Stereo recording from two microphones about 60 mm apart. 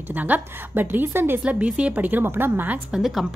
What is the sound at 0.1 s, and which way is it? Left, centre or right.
Speech, right.